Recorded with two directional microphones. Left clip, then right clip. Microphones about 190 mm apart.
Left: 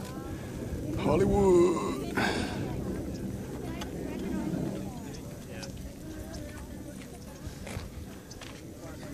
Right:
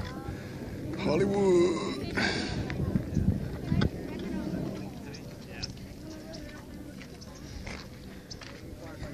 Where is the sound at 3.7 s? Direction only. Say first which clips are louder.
Right 13 dB; 40° right (ahead or behind).